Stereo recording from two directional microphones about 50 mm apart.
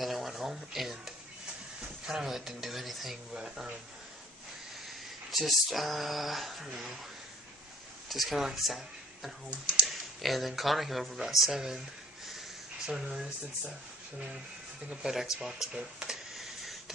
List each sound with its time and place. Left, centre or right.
0.0 s a sound: centre
2.0 s speech: centre
3.3 s speech: centre
5.3 s speech: centre
8.1 s speech: centre
12.8 s speech: centre
14.9 s speech: centre
16.3 s a sound: centre